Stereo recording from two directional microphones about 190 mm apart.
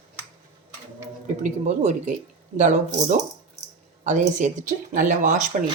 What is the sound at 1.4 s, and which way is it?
Speech, 40° right (ahead or behind).